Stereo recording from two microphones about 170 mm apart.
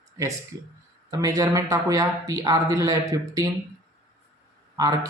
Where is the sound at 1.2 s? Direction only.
20° right (ahead or behind).